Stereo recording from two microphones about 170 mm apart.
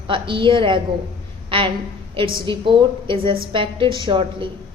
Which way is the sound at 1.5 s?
30° right (ahead or behind).